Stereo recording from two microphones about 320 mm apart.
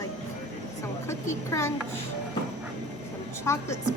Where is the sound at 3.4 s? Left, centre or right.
Centre.